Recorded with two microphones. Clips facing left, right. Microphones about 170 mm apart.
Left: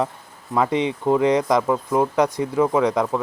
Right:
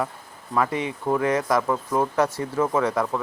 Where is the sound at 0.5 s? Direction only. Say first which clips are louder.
Left 4 dB; 20° left (ahead or behind).